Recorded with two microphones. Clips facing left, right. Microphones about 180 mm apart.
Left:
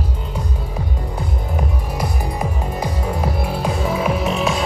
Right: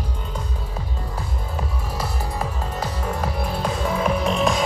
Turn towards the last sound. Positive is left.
turn(degrees=5)  # may be behind; listen again after turning